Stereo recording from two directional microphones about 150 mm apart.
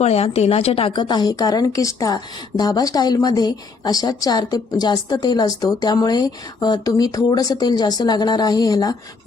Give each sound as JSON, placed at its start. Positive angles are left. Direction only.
{"t": 0.0, "sound": "a woman's voice", "side_deg": 45}